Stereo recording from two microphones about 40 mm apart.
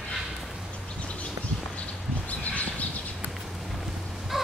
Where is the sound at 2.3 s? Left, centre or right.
Left.